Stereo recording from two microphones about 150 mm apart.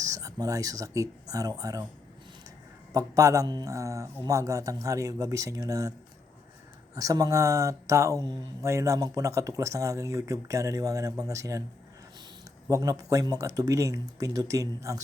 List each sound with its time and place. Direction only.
0.0 s speech: 25° right (ahead or behind)
2.9 s speech: 20° right (ahead or behind)
6.9 s speech: 25° right (ahead or behind)
12.6 s speech: 25° right (ahead or behind)